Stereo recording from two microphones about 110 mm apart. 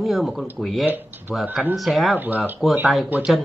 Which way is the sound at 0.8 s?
15° right (ahead or behind).